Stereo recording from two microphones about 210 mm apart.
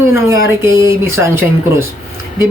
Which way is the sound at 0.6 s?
15° right (ahead or behind).